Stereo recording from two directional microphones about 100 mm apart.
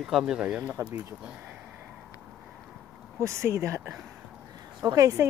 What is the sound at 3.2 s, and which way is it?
Speech, 25° right (ahead or behind).